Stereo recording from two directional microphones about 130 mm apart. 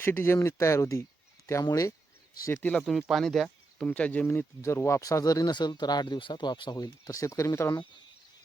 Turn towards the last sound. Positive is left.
turn(degrees=20)  # may be behind; listen again after turning